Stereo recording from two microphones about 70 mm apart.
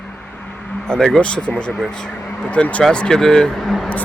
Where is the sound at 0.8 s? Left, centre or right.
Centre.